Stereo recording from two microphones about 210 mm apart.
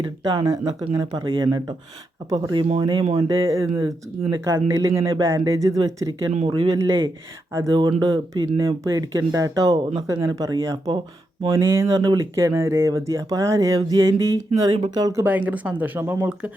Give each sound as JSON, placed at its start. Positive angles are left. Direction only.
{"t": 0.0, "sound": "speech", "side_deg": -20}